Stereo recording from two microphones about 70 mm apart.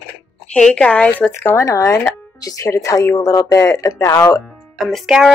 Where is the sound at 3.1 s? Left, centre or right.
Left.